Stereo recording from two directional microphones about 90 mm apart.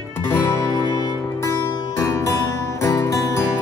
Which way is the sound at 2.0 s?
35° left (ahead or behind).